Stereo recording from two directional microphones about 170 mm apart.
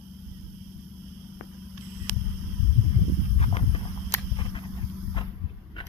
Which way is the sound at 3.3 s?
35° left (ahead or behind).